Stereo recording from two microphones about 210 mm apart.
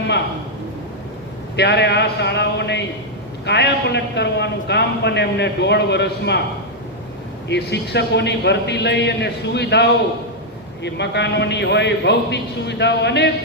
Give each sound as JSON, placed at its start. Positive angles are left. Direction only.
{"t": 1.5, "sound": "a man's voice", "side_deg": 55}
{"t": 7.4, "sound": "a man's voice", "side_deg": 55}